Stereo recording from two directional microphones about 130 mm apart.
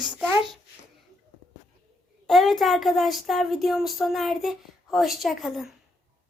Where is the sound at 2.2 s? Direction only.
Centre (ahead or behind).